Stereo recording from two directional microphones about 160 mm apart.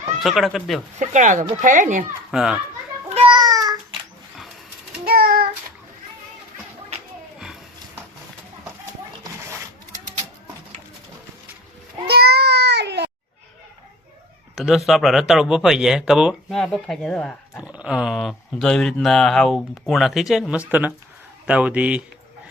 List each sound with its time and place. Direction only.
0.2 s speech: centre (ahead or behind)
0.9 s speech: 50° right (ahead or behind)
2.3 s speech: 5° right (ahead or behind)
3.2 s child singing: 30° right (ahead or behind)
5.0 s child singing: 70° right (ahead or behind)
7.3 s a sound: 5° right (ahead or behind)
12.0 s a sound: 85° right
14.6 s speech: centre (ahead or behind)
17.6 s speech: 10° right (ahead or behind)